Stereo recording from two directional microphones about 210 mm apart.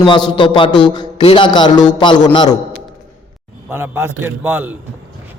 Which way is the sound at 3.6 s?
10° right (ahead or behind).